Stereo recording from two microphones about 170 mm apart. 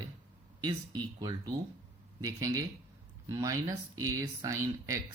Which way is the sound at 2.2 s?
20° right (ahead or behind).